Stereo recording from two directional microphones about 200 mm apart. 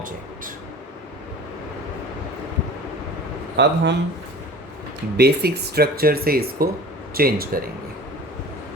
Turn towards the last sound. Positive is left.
turn(degrees=-50)  # may be behind; listen again after turning